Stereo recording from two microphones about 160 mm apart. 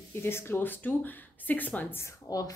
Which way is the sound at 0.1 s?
15° left (ahead or behind).